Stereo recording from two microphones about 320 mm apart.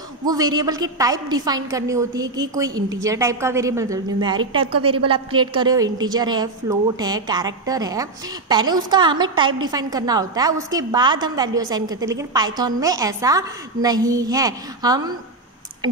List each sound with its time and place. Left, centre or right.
0.2 s a woman's voice: centre
4.4 s a woman's voice: right
4.7 s a woman's voice: centre